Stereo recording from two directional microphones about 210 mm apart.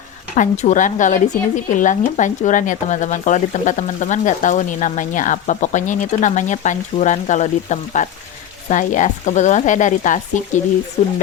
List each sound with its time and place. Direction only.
0.3 s speech: 35° left (ahead or behind)